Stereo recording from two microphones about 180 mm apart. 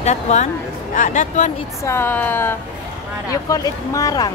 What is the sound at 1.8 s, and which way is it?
A woman's voice, 15° left (ahead or behind).